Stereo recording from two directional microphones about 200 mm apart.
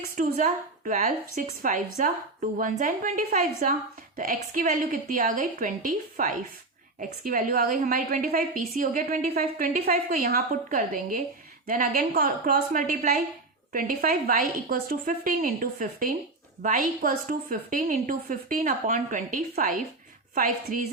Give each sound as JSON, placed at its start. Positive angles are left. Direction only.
{"t": 0.0, "sound": "a woman's voice", "side_deg": -40}